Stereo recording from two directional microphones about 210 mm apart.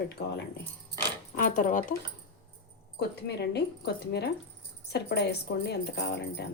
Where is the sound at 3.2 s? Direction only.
50° left (ahead or behind).